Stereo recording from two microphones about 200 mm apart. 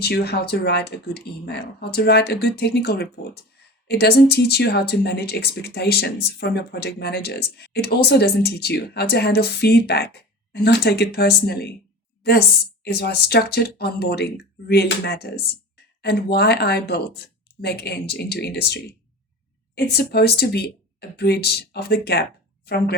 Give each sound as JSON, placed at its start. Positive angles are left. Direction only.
{"t": 0.0, "sound": "speech", "side_deg": 55}